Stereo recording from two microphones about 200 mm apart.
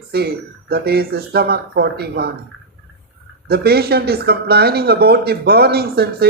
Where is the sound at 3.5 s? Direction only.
50° right (ahead or behind).